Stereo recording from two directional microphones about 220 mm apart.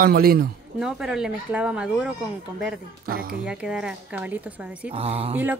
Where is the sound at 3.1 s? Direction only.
40° right (ahead or behind).